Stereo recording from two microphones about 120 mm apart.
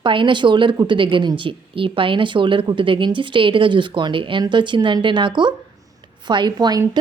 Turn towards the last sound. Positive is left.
turn(degrees=-35)  # may be behind; listen again after turning